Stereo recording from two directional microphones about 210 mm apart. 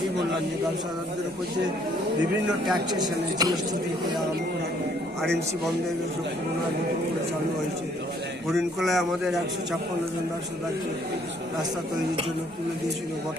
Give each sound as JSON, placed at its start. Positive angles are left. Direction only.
{"t": 2.9, "sound": "speech", "side_deg": -20}
{"t": 8.4, "sound": "a man's voice", "side_deg": 0}